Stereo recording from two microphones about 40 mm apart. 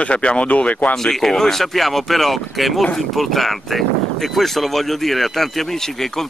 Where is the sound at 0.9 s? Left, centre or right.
Centre.